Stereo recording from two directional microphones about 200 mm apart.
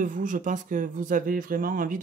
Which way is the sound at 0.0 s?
40° right (ahead or behind).